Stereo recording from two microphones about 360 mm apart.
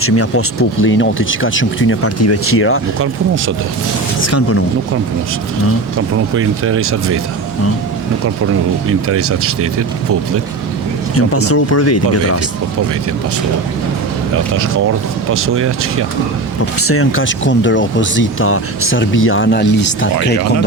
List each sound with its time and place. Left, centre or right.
0.0 s speech: left
4.3 s speech: left
6.3 s speech: right
9.0 s speech: right
11.3 s speech: left
15.3 s speech: right
16.8 s speech: left